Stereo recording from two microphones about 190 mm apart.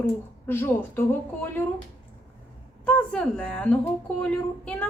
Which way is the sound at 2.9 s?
5° left (ahead or behind).